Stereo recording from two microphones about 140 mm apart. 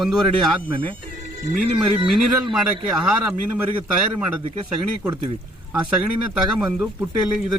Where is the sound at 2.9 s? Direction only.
5° right (ahead or behind).